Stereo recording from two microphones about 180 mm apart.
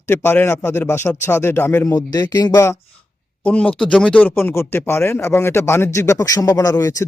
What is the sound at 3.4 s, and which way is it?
Speech, 5° left (ahead or behind).